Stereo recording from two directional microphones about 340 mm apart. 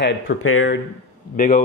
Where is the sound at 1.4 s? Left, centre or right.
Left.